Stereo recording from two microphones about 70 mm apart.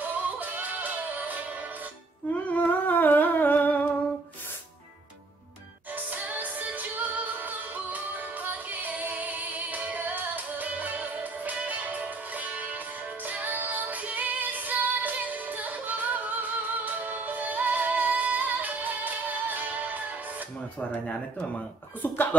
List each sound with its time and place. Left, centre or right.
0.0 s music: right
2.3 s humming: left
5.9 s music: right
22.0 s speech: left